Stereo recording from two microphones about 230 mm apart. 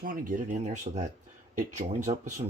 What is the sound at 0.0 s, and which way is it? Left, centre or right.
Speech, right.